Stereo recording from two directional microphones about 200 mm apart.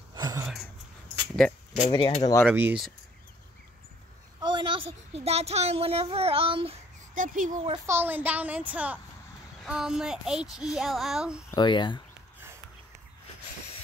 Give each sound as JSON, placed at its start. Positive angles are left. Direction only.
{"t": 0.1, "sound": "a sound", "side_deg": -15}
{"t": 1.9, "sound": "speech", "side_deg": 25}
{"t": 2.5, "sound": "speech", "side_deg": -5}
{"t": 4.4, "sound": "a child's voice", "side_deg": -20}
{"t": 7.2, "sound": "speech", "side_deg": -40}
{"t": 7.7, "sound": "a child's voice", "side_deg": -15}
{"t": 11.5, "sound": "speech", "side_deg": 20}